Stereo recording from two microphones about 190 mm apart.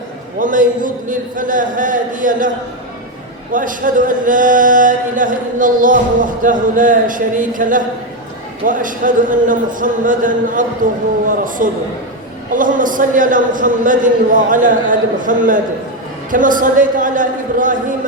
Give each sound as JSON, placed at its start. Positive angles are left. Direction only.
{"t": 0.3, "sound": "chant", "side_deg": -45}
{"t": 3.5, "sound": "chant", "side_deg": -45}